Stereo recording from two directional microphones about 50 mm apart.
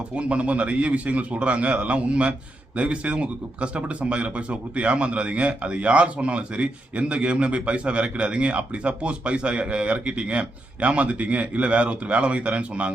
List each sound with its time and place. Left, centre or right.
0.2 s speech: right